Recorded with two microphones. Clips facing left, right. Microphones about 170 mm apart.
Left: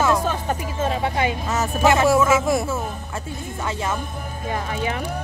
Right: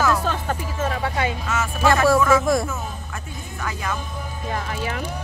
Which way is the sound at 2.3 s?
5° left (ahead or behind).